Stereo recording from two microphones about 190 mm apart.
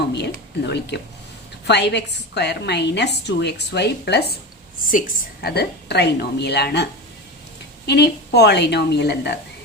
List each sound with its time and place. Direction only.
0.1 s a woman's voice: 60° left (ahead or behind)
4.8 s a woman's voice: 45° left (ahead or behind); by 6.8 s 60° left (ahead or behind)
7.9 s a woman's voice: 60° left (ahead or behind)